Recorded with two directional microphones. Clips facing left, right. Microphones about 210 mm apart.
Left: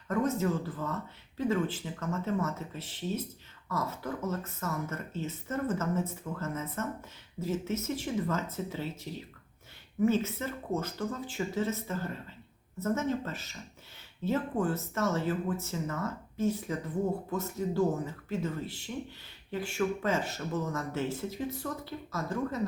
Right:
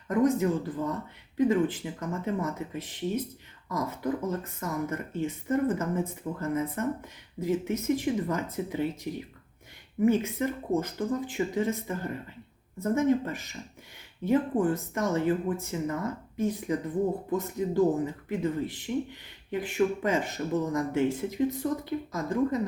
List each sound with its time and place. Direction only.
0.1 s speech: 15° right (ahead or behind)